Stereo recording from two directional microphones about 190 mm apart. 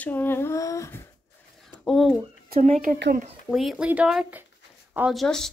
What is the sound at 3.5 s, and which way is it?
Speech, 5° right (ahead or behind).